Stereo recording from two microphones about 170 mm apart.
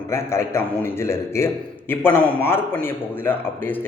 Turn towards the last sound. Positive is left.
turn(degrees=10)  # may be behind; listen again after turning